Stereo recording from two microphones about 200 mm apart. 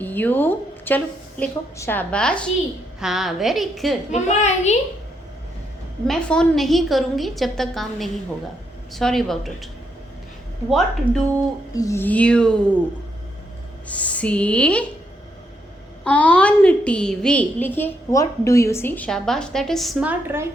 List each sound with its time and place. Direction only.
0.0 s a woman's voice: 10° left (ahead or behind)
4.1 s a child's voice: 35° left (ahead or behind)
6.1 s a woman's voice: 5° left (ahead or behind)
10.7 s a woman's voice: centre (ahead or behind)
11.7 s speech: 15° left (ahead or behind)
13.8 s speech: 5° left (ahead or behind)
16.0 s a woman's voice: 5° left (ahead or behind); by 20.5 s 10° right (ahead or behind)